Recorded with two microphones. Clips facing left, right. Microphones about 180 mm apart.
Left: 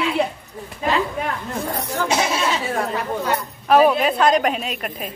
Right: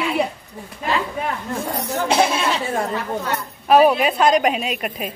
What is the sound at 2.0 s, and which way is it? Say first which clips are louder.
Speech: right 3 dB; 60° right (ahead or behind).